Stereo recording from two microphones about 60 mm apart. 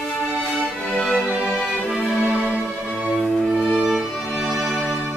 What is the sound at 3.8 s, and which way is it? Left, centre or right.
Music, centre.